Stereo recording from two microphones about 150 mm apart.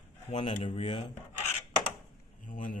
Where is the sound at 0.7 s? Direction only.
35° left (ahead or behind).